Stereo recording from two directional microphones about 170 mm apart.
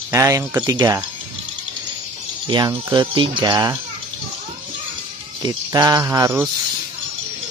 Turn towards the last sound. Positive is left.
turn(degrees=-15)  # may be behind; listen again after turning